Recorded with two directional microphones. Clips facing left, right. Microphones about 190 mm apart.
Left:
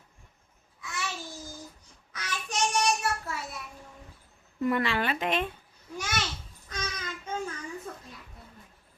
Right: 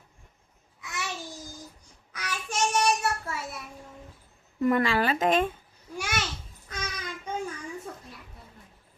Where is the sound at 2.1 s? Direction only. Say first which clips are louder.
Right 1 dB; 5° right (ahead or behind).